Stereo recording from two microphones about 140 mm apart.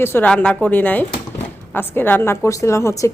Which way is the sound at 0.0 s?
15° left (ahead or behind).